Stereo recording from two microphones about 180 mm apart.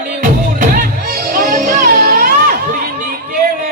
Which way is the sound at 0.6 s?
50° right (ahead or behind).